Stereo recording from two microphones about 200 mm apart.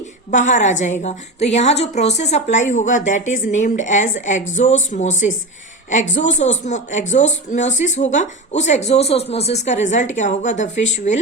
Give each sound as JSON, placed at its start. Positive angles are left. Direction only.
{"t": 0.3, "sound": "a woman's voice", "side_deg": 40}